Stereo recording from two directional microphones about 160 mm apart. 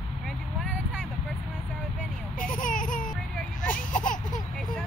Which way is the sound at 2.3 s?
55° left (ahead or behind).